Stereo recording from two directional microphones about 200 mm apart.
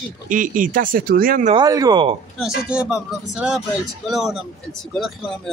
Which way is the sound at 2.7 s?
5° right (ahead or behind).